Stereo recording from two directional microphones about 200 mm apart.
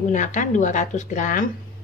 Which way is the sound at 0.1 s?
40° left (ahead or behind).